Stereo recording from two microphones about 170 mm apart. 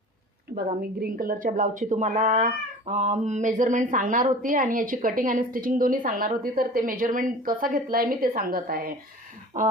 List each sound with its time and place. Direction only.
0.5 s a woman's voice: 60° right (ahead or behind)